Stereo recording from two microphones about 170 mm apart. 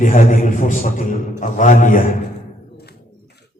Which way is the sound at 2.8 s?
70° left (ahead or behind).